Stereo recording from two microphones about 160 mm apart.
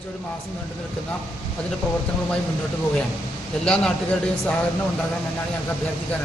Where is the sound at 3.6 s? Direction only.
Centre (ahead or behind).